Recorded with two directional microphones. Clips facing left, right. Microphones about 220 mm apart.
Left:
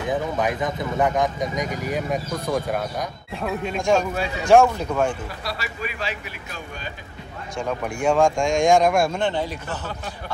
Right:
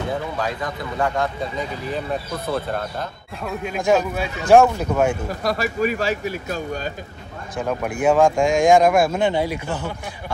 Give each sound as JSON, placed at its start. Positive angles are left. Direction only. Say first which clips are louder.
{"t": 0.0, "sound": "speech", "louder": "left 2 dB", "side_deg": 20}
{"t": 3.6, "sound": "speech", "louder": "right 2 dB", "side_deg": -5}
{"t": 5.3, "sound": "a man's voice", "louder": "right 9 dB", "side_deg": -45}
{"t": 7.5, "sound": "speech", "louder": "right 3 dB", "side_deg": -5}